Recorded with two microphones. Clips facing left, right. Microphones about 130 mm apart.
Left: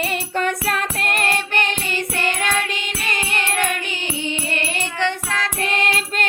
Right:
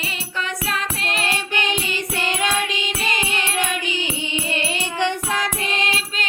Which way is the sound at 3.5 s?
55° left (ahead or behind).